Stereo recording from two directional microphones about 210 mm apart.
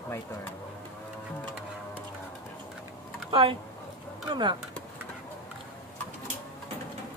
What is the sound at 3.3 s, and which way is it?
Speech, 25° right (ahead or behind).